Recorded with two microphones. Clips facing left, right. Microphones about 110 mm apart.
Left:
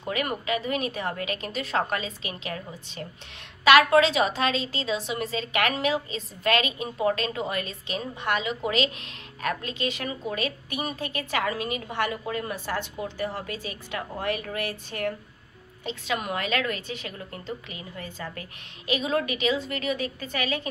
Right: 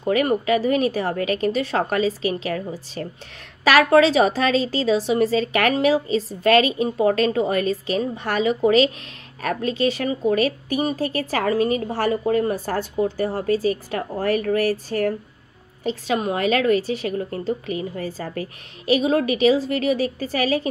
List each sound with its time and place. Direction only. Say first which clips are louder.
0.0 s a woman's voice: right 10 dB; 35° right (ahead or behind)